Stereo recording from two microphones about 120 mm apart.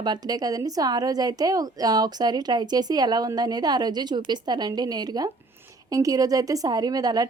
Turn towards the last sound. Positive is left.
turn(degrees=-30)  # may be behind; listen again after turning